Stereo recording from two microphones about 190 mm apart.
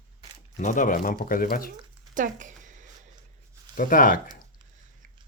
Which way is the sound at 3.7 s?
45° left (ahead or behind).